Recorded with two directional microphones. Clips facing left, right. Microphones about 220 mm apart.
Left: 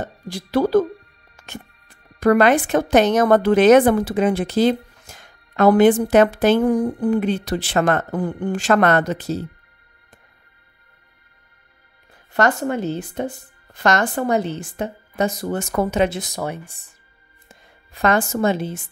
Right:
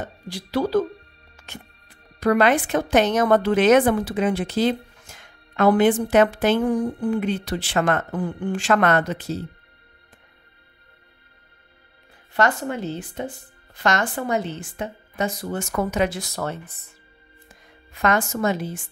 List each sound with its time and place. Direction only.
0.3 s speech: 50° left (ahead or behind)
1.3 s music: 50° left (ahead or behind)
2.1 s a woman's voice: 50° left (ahead or behind)
12.4 s a woman's voice: 45° left (ahead or behind); by 16.3 s 25° left (ahead or behind)
16.3 s speech: 15° left (ahead or behind)
17.5 s speech: 35° left (ahead or behind)